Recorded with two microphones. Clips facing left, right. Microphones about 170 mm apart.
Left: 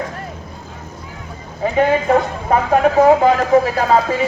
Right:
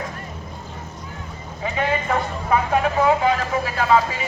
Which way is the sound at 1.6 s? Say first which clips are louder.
Left 8 dB; 40° left (ahead or behind).